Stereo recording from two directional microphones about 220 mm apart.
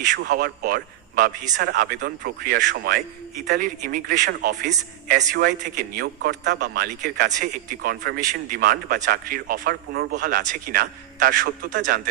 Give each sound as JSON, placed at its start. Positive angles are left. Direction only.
{"t": 0.2, "sound": "a man's voice", "side_deg": -45}